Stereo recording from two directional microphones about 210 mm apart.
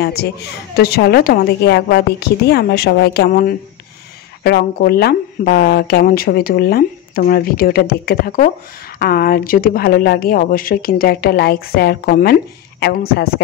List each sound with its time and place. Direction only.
0.0 s speech: 50° left (ahead or behind)